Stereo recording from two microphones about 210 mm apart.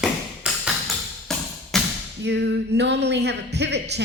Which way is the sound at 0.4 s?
5° right (ahead or behind).